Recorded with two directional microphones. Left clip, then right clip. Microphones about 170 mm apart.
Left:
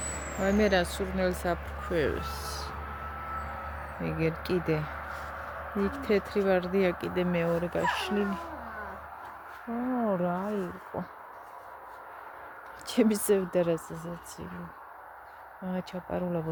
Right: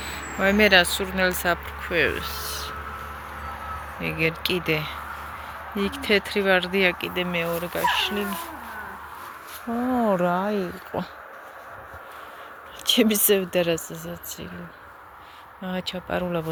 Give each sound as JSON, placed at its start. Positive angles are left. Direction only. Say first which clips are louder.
{"t": 0.4, "sound": "speech", "louder": "right 9 dB", "side_deg": 0}
{"t": 1.9, "sound": "speech", "louder": "right 6 dB", "side_deg": 20}
{"t": 4.0, "sound": "speech", "louder": "right 7 dB", "side_deg": 15}
{"t": 7.0, "sound": "speech", "louder": "right 4 dB", "side_deg": 30}
{"t": 9.9, "sound": "speech", "louder": "right 8 dB", "side_deg": -15}
{"t": 12.8, "sound": "a sound", "louder": "right 7 dB", "side_deg": 45}
{"t": 13.2, "sound": "speech", "louder": "right 5 dB", "side_deg": 5}
{"t": 15.6, "sound": "speech", "louder": "right 7 dB", "side_deg": 0}